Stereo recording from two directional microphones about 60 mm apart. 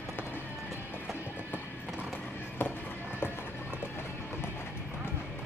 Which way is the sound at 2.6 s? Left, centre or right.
Left.